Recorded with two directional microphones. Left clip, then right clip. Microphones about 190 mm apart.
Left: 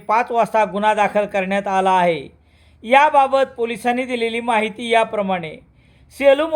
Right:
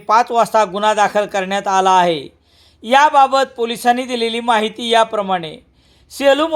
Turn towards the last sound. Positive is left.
turn(degrees=-20)  # may be behind; listen again after turning